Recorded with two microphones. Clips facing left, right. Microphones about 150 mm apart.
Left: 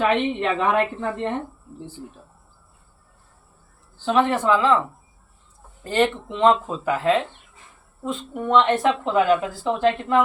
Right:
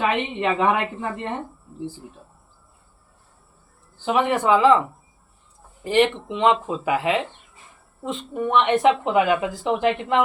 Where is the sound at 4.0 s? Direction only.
15° right (ahead or behind).